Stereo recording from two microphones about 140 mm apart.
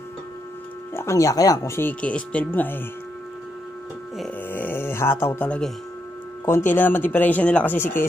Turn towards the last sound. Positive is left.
turn(degrees=15)  # may be behind; listen again after turning